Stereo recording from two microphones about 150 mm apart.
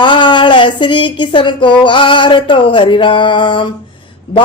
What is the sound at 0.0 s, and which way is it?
Speech, 30° left (ahead or behind).